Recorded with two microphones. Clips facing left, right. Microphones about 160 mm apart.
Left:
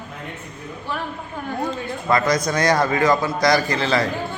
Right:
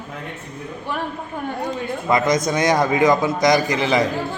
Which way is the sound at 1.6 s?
15° right (ahead or behind).